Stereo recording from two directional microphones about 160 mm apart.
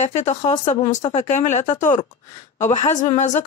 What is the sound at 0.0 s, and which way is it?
Speech, 45° left (ahead or behind).